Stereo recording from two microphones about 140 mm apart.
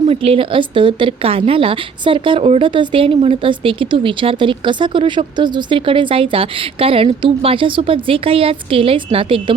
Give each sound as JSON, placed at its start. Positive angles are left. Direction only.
{"t": 0.0, "sound": "a woman's voice", "side_deg": -45}